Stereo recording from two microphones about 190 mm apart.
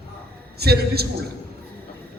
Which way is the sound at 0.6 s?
55° right (ahead or behind).